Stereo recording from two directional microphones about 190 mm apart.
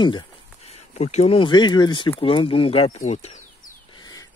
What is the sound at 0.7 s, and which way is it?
Speech, 35° left (ahead or behind).